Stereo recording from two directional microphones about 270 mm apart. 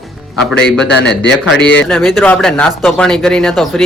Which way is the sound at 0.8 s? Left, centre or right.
Left.